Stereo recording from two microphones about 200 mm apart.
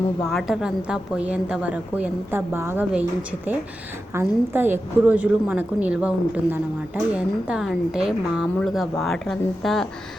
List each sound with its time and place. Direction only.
0.3 s a woman's voice: centre (ahead or behind)